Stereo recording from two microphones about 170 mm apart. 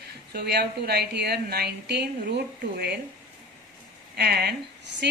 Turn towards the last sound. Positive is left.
turn(degrees=-75)  # may be behind; listen again after turning